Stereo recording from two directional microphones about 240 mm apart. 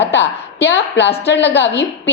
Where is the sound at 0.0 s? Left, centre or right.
Left.